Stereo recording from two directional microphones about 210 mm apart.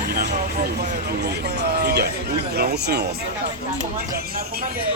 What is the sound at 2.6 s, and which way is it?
Speech, 50° right (ahead or behind).